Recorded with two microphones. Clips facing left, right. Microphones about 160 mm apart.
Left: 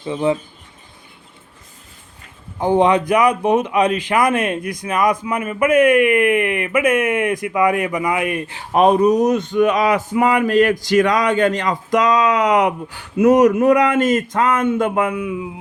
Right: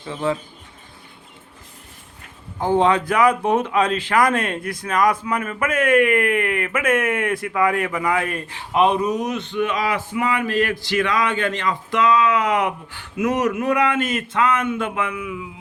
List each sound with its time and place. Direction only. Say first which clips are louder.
0.0 s speech: left 5 dB; 20° left (ahead or behind)
2.6 s speech: left 3 dB; 15° left (ahead or behind)
8.7 s speech: left 5 dB; 45° left (ahead or behind)
14.8 s a sound: left 7 dB; 40° left (ahead or behind)